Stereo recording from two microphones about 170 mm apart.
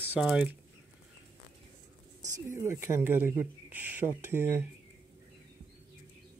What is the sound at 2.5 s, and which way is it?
Speech, 15° right (ahead or behind).